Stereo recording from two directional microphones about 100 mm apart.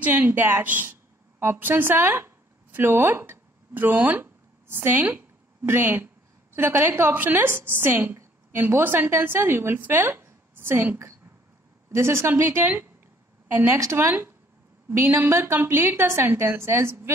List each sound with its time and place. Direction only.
0.0 s a woman's voice: 15° right (ahead or behind)
13.7 s a woman's voice: 30° right (ahead or behind)